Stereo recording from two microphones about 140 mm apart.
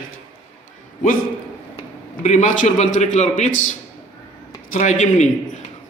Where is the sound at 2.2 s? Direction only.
60° left (ahead or behind).